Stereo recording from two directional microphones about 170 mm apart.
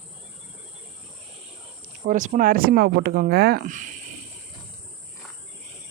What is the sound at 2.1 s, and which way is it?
Speech, 50° right (ahead or behind).